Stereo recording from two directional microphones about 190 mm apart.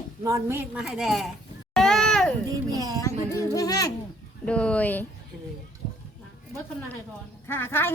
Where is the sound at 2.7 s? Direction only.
20° right (ahead or behind).